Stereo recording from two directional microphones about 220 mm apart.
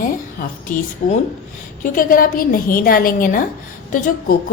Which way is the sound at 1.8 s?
40° left (ahead or behind).